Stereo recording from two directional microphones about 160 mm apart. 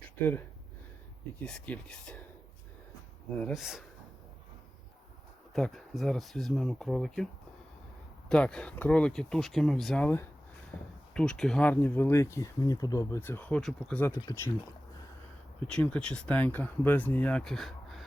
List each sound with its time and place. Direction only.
0.2 s speech: 10° left (ahead or behind)
3.5 s speech: centre (ahead or behind)
5.5 s speech: centre (ahead or behind)
8.3 s speech: 5° left (ahead or behind)
10.7 s a sound: 15° left (ahead or behind)
11.1 s speech: 5° left (ahead or behind)
15.6 s speech: 5° left (ahead or behind)